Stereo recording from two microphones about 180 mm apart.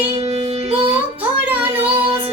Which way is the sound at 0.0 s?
35° right (ahead or behind).